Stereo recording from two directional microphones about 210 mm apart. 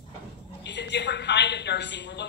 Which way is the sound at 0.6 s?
55° left (ahead or behind).